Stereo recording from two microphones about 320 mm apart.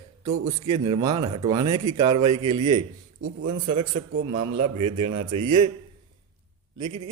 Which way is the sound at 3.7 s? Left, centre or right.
Right.